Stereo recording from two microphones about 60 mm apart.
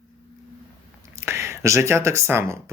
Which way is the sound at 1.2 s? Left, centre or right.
Right.